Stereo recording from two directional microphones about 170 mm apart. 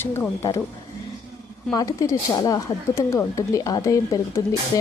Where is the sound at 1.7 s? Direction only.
20° left (ahead or behind).